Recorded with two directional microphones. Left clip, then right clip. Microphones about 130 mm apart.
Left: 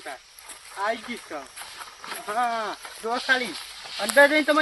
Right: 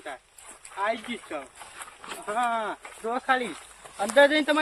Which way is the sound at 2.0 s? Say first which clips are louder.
Left 2 dB; 35° right (ahead or behind).